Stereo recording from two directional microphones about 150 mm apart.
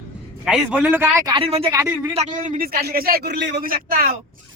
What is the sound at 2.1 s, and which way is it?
A man's voice, 50° right (ahead or behind).